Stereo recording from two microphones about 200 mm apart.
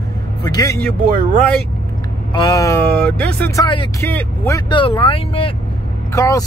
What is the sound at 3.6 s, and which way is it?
Speech, 25° left (ahead or behind).